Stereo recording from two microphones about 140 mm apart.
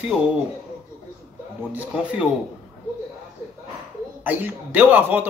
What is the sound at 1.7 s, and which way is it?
Speech, 10° right (ahead or behind).